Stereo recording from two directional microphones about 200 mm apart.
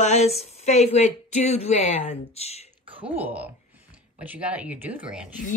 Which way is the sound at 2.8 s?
25° right (ahead or behind).